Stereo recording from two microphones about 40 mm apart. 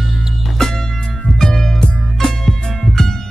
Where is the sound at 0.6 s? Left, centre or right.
Centre.